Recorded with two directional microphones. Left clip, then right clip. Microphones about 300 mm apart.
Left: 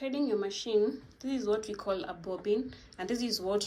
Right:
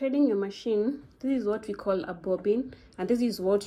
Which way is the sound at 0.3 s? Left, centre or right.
Centre.